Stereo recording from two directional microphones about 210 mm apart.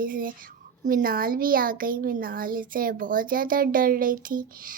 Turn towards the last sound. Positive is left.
turn(degrees=-40)  # may be behind; listen again after turning